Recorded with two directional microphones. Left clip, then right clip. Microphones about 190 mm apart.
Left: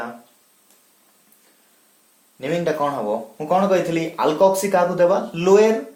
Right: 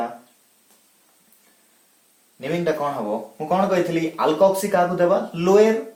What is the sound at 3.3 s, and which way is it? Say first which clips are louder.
Speech: left 2 dB; 50° left (ahead or behind).